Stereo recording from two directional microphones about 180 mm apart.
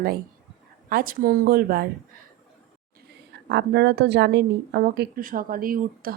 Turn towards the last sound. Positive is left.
turn(degrees=-50)  # may be behind; listen again after turning